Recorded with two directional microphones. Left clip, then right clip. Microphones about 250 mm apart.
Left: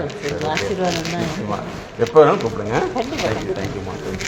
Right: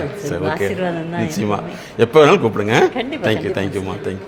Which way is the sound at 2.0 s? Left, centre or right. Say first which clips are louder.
Right 2 dB; right.